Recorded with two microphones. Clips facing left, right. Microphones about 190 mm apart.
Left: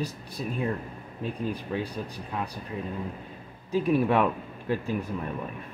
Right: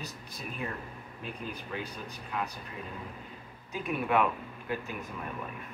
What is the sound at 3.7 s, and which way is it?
Speech, 30° left (ahead or behind).